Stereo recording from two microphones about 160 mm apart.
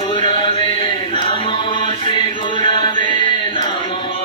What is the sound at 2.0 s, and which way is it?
Music, 30° left (ahead or behind).